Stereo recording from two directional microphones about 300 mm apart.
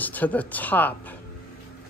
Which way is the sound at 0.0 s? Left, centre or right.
Centre.